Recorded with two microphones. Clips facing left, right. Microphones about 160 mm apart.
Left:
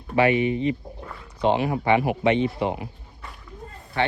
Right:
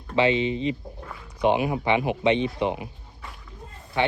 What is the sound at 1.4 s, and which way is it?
Speech, 15° right (ahead or behind).